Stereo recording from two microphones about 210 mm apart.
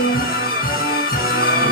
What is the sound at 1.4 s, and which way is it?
Music, 45° left (ahead or behind).